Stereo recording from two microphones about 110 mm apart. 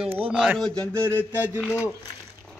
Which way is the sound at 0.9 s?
25° right (ahead or behind).